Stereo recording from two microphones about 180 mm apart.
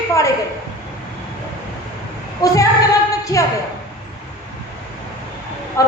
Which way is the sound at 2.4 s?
20° left (ahead or behind).